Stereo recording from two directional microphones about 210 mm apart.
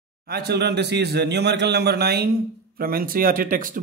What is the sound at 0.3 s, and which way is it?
Speech, 50° right (ahead or behind).